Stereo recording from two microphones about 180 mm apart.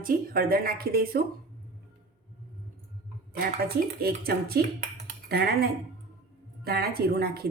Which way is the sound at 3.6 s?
60° right (ahead or behind).